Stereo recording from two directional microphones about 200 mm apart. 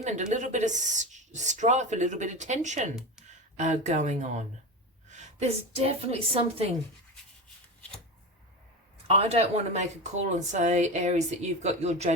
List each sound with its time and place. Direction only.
0.0 s speech: 35° right (ahead or behind)
9.0 s speech: 30° right (ahead or behind)